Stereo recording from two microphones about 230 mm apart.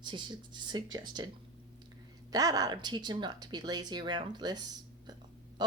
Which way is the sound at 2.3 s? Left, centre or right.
Centre.